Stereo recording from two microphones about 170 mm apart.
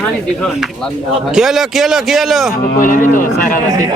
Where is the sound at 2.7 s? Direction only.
50° left (ahead or behind).